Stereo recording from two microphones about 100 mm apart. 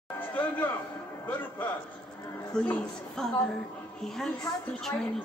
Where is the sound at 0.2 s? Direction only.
20° left (ahead or behind).